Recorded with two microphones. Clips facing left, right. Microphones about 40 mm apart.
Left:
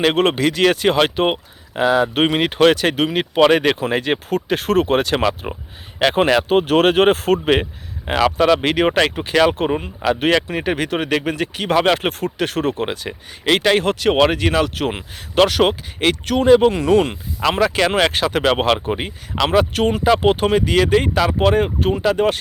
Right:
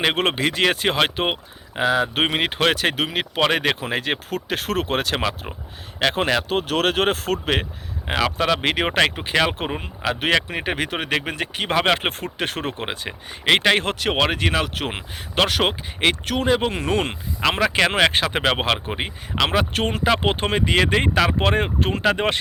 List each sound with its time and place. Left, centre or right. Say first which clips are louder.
0.0 s speech: left 4 dB; centre
6.1 s speech: left 7 dB; centre
6.5 s speech: left 7 dB; left
8.0 s speech: left 6 dB; centre; by 13.9 s right
14.0 s speech: left 5 dB; centre
16.7 s speech: left 7 dB; right
17.4 s speech: left 2 dB; right
19.7 s speech: left 5 dB; right
21.8 s speech: left 3 dB; right